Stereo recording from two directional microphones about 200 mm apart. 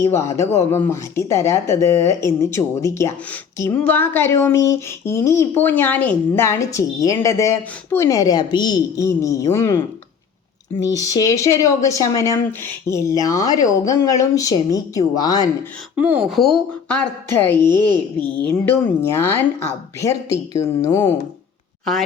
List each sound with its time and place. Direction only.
0.0 s a woman's voice: 15° left (ahead or behind)
16.0 s speech: 10° right (ahead or behind)
17.4 s a woman's voice: 10° left (ahead or behind)